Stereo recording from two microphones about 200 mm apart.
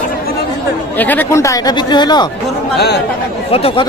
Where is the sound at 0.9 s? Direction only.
10° left (ahead or behind).